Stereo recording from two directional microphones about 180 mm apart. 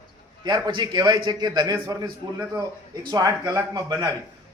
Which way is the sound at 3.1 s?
20° right (ahead or behind).